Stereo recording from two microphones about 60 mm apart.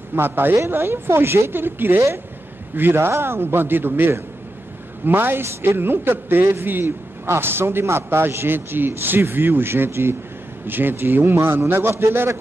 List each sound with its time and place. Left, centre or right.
0.1 s a man's voice: right